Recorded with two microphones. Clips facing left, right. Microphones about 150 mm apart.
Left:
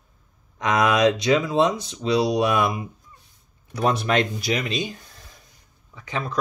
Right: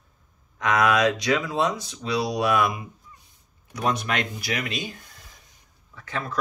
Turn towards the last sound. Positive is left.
turn(degrees=15)  # may be behind; listen again after turning